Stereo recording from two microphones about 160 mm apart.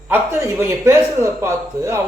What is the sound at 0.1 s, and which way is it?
A woman's voice, 15° right (ahead or behind).